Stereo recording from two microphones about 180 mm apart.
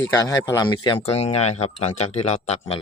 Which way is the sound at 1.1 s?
35° left (ahead or behind).